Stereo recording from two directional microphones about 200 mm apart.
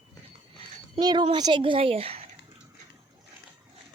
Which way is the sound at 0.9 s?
20° right (ahead or behind).